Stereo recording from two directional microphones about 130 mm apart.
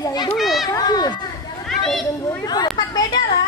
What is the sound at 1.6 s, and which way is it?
Children playing, 5° left (ahead or behind).